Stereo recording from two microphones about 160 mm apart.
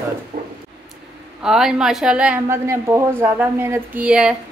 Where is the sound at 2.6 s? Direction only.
20° right (ahead or behind).